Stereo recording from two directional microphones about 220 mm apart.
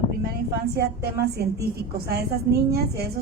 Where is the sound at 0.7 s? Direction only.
45° right (ahead or behind).